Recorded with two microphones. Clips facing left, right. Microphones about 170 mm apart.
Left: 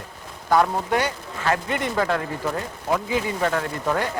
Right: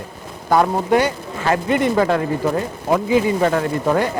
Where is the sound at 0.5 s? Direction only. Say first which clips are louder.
Right 5 dB; 10° right (ahead or behind).